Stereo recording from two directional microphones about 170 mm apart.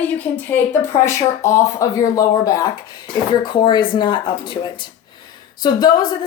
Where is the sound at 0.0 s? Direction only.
10° left (ahead or behind).